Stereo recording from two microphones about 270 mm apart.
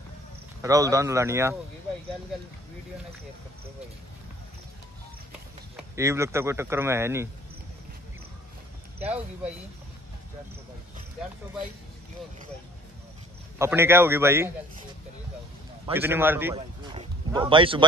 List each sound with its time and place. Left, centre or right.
0.6 s speech: centre
5.8 s speech: centre
9.0 s speech: centre
13.6 s speech: centre
15.9 s speech: centre
16.5 s a sound: right